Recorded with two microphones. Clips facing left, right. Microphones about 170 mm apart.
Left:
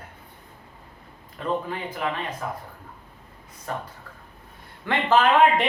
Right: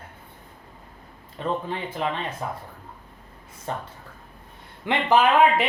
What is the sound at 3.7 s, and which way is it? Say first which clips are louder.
Speech: even; 25° right (ahead or behind).